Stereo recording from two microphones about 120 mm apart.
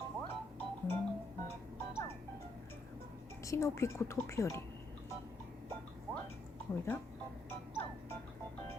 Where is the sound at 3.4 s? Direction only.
25° left (ahead or behind).